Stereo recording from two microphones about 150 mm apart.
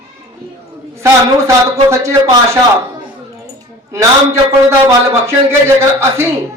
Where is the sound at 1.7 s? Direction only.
20° right (ahead or behind).